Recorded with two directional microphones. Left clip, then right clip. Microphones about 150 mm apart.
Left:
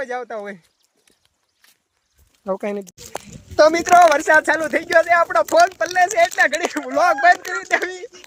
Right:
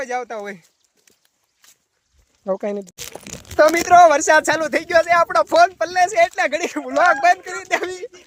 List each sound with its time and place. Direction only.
0.0 s speech: 5° right (ahead or behind)
1.6 s a sound: 90° right
2.4 s speech: 5° right (ahead or behind)
3.5 s a woman's voice: 15° left (ahead or behind)
3.9 s speech: 10° right (ahead or behind)
6.9 s speech: 10° left (ahead or behind)
7.2 s speech: 10° right (ahead or behind)